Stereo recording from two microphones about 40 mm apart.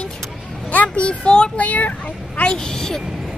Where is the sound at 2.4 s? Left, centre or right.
Centre.